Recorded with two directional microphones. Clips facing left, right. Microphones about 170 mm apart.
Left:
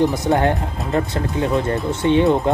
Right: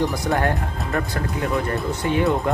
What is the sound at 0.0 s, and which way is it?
Speech, 20° left (ahead or behind).